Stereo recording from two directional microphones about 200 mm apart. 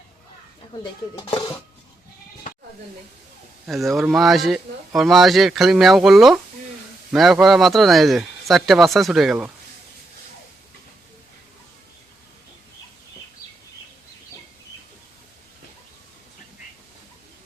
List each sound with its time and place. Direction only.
1.1 s speech: 20° left (ahead or behind)
3.7 s speech: centre (ahead or behind)